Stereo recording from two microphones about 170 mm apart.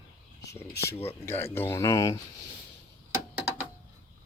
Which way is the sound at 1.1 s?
10° left (ahead or behind).